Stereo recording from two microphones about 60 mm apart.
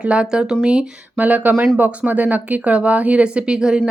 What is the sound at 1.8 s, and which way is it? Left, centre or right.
Speech, right.